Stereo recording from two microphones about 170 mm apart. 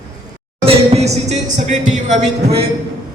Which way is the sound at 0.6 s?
40° right (ahead or behind).